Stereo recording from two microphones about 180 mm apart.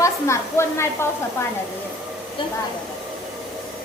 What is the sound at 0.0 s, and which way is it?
Speech, 15° left (ahead or behind).